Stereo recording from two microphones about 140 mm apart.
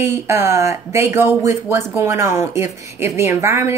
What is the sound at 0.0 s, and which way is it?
Speech, 20° right (ahead or behind).